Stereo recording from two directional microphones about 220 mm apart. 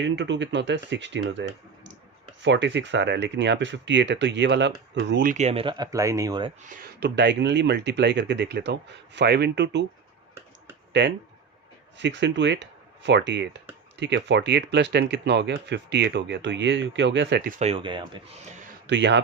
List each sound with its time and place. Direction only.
0.0 s speech: 55° right (ahead or behind)
5.3 s speech: 30° right (ahead or behind)
6.7 s speech: 50° right (ahead or behind)
11.9 s speech: 55° right (ahead or behind)
17.6 s speech: 25° right (ahead or behind)
18.9 s speech: 55° right (ahead or behind)